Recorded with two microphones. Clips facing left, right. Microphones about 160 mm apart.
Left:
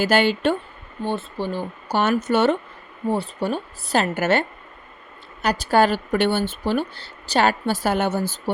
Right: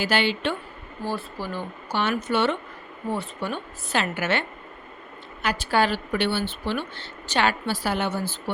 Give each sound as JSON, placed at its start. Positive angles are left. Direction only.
{"t": 0.0, "sound": "speech", "side_deg": 45}
{"t": 1.0, "sound": "speech", "side_deg": 25}
{"t": 2.0, "sound": "a woman's voice", "side_deg": 45}